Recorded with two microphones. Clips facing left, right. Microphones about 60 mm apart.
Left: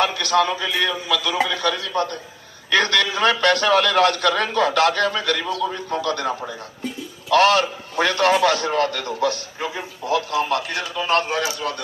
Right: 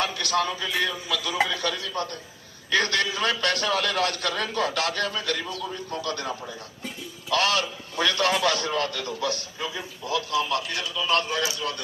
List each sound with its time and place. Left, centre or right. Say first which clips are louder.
0.0 s a man's voice: left 7 dB; left
0.5 s a man's voice: left 5 dB; left